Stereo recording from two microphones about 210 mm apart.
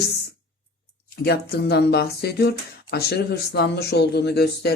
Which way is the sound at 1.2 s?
50° left (ahead or behind).